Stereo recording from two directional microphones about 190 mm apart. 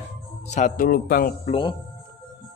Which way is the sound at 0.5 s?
40° left (ahead or behind).